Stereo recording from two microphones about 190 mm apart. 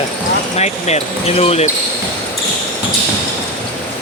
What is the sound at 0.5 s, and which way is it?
Speech, 35° left (ahead or behind).